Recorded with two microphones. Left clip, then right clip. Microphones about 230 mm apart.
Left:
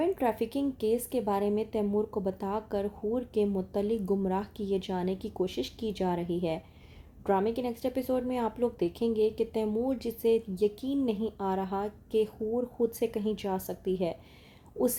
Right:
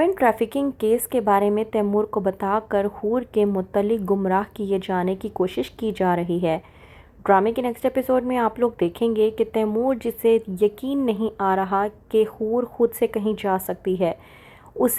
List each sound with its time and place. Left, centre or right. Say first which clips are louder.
0.0 s a woman's voice: right 10 dB; centre